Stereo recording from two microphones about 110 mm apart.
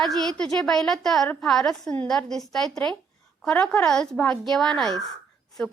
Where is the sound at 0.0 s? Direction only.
5° left (ahead or behind).